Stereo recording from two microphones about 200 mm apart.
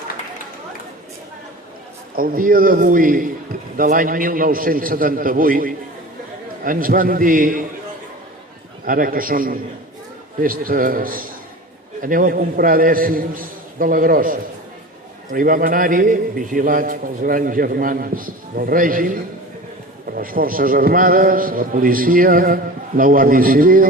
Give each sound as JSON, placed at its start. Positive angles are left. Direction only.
{"t": 2.1, "sound": "a man's voice", "side_deg": -45}
{"t": 8.8, "sound": "a man's voice", "side_deg": -45}